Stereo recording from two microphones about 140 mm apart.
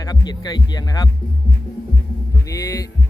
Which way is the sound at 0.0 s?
30° left (ahead or behind).